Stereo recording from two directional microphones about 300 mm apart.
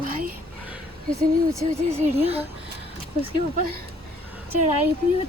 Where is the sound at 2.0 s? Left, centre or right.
Centre.